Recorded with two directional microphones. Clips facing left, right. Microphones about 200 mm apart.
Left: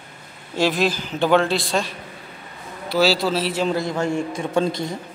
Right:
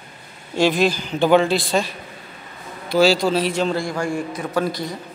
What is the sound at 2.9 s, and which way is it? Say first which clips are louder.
Speech: right 3 dB; 5° left (ahead or behind).